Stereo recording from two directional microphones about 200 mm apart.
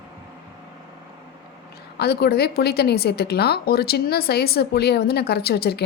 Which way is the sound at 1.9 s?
55° left (ahead or behind).